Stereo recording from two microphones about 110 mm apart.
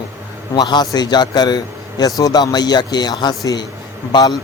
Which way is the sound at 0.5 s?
40° left (ahead or behind).